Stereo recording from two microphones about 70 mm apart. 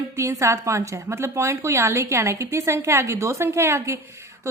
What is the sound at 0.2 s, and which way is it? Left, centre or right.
A woman's voice, right.